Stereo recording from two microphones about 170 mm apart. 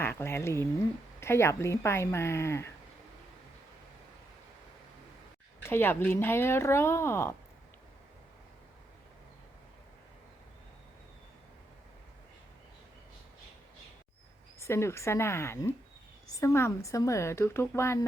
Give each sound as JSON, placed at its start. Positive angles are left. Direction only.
{"t": 0.0, "sound": "speech", "side_deg": 15}
{"t": 5.6, "sound": "speech", "side_deg": 15}
{"t": 14.6, "sound": "speech", "side_deg": 15}